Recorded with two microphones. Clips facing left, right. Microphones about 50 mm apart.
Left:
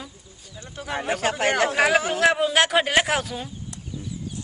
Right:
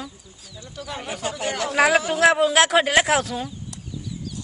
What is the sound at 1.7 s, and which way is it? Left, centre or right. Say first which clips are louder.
A man's voice: right 2 dB; centre.